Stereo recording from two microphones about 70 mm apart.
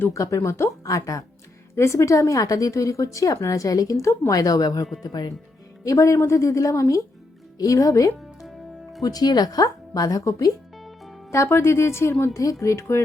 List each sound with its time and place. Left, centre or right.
0.1 s speech: left
4.3 s speech: left
5.0 s speech: left
5.8 s speech: left
8.4 s music: centre
9.0 s speech: left
10.8 s music: centre
11.3 s a woman's voice: left
12.3 s speech: left